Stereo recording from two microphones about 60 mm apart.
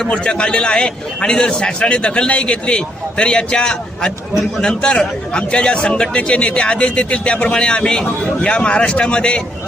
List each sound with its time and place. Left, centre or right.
0.1 s a man's voice: centre